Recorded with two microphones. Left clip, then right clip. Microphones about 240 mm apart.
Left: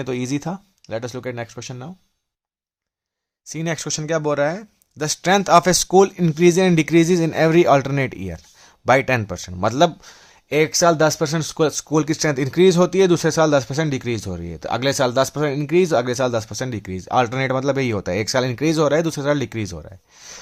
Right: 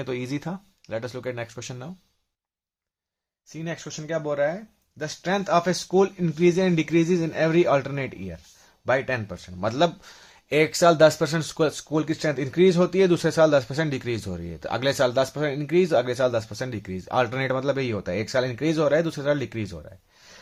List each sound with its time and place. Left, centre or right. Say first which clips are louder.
0.0 s speech: left 5 dB; left
3.4 s speech: left 8 dB; left